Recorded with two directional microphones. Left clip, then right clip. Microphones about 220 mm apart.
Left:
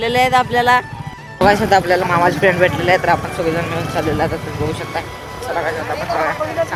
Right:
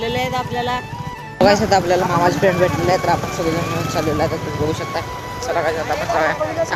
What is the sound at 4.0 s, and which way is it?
Speech, 20° left (ahead or behind).